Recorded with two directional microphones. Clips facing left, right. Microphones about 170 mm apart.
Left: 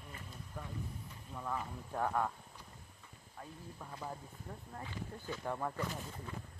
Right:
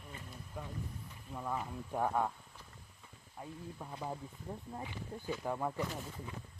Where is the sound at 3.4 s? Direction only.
15° right (ahead or behind).